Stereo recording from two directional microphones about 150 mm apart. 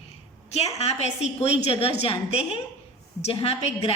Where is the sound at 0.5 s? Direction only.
45° left (ahead or behind).